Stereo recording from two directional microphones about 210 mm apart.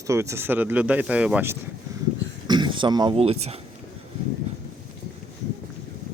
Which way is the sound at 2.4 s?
20° right (ahead or behind).